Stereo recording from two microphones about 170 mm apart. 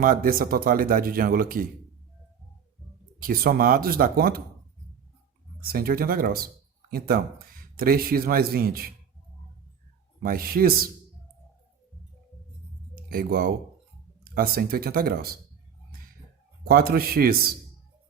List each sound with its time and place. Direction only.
0.0 s speech: 55° right (ahead or behind)
3.2 s speech: 60° right (ahead or behind)
5.6 s speech: 60° right (ahead or behind)
10.2 s speech: 60° right (ahead or behind)
13.0 s speech: 60° right (ahead or behind)
15.9 s a sound: 60° right (ahead or behind)
16.6 s speech: 60° right (ahead or behind)